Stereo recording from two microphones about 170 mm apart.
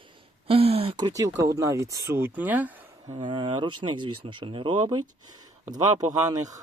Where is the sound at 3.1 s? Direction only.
30° right (ahead or behind).